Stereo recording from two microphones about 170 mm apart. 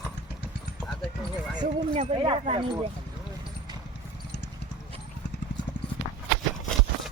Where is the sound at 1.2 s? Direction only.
Centre (ahead or behind).